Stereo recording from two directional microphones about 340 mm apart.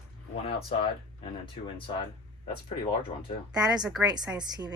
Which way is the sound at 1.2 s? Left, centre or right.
Centre.